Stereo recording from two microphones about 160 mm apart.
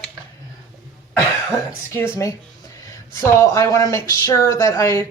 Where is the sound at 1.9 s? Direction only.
15° left (ahead or behind).